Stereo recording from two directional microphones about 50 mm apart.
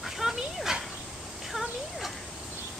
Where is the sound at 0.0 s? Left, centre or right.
Centre.